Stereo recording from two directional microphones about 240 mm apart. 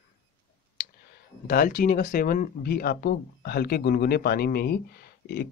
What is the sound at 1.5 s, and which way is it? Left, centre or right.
Speech, left.